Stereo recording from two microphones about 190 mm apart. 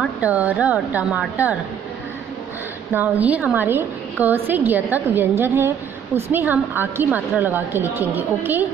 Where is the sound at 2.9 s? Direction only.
10° right (ahead or behind).